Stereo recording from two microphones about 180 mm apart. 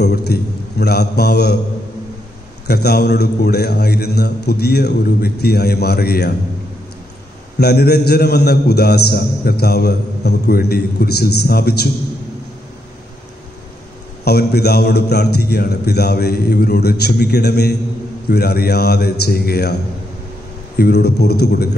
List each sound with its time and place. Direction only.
0.0 s a man's voice: 65° left (ahead or behind)
2.7 s a man's voice: 65° left (ahead or behind)
7.5 s a man's voice: 65° left (ahead or behind)
14.2 s a man's voice: 65° left (ahead or behind)